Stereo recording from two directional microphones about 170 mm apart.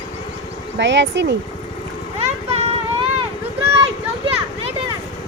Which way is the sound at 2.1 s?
40° right (ahead or behind).